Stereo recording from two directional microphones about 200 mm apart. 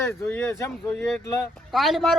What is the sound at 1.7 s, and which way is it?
Speech, centre (ahead or behind).